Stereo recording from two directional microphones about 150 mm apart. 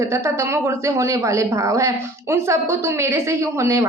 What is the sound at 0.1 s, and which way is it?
Speech, 20° right (ahead or behind).